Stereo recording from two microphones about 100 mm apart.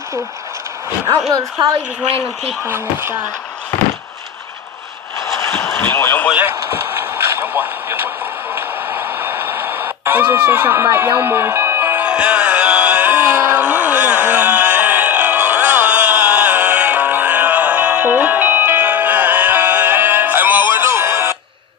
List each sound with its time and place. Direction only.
1.6 s speech: 50° right (ahead or behind)
2.6 s speech: 25° right (ahead or behind)
5.6 s a sound: 20° left (ahead or behind)
6.5 s radio: 25° right (ahead or behind)